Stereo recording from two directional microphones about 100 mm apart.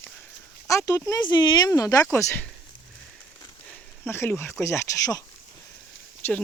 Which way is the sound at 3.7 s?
20° left (ahead or behind).